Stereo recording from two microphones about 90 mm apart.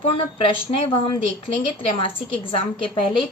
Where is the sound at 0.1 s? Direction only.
85° left.